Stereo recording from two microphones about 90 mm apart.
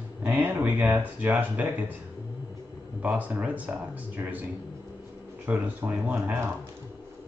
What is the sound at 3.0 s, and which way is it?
Speech, 15° right (ahead or behind).